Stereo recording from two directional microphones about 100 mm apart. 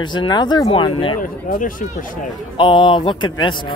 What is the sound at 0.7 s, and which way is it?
Speech, 55° left (ahead or behind).